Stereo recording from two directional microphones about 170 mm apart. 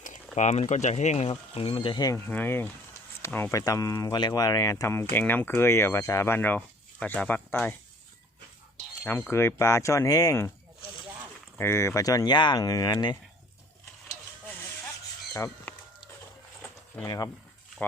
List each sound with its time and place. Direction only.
0.3 s speech: 45° left (ahead or behind); by 7.8 s 10° left (ahead or behind)
9.3 s speech: 15° left (ahead or behind)
11.5 s speech: 15° left (ahead or behind)
15.3 s chicken: 10° left (ahead or behind)
16.9 s speech: 20° left (ahead or behind)